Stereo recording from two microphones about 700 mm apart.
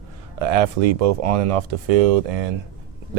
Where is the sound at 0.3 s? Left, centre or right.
Right.